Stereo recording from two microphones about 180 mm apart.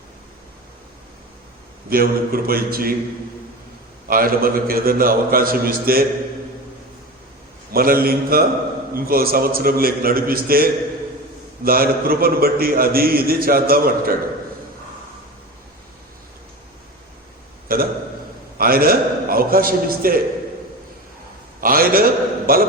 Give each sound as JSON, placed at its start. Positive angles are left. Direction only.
{"t": 1.9, "sound": "a man's voice", "side_deg": -55}
{"t": 4.1, "sound": "a man's voice", "side_deg": -55}
{"t": 7.7, "sound": "a man's voice", "side_deg": -55}
{"t": 17.7, "sound": "a man's voice", "side_deg": -55}
{"t": 21.6, "sound": "a man's voice", "side_deg": -55}